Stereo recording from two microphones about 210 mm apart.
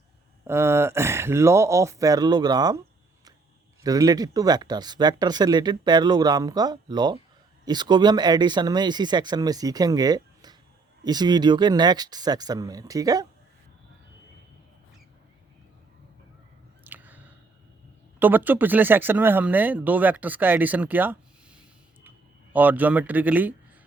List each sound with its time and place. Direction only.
0.4 s speech: 10° right (ahead or behind)
3.8 s speech: 15° right (ahead or behind)
16.8 s chewing: 10° right (ahead or behind)
18.2 s speech: 10° right (ahead or behind)